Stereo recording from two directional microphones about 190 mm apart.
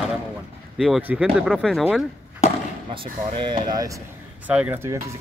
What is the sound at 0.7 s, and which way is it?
Speech, centre (ahead or behind).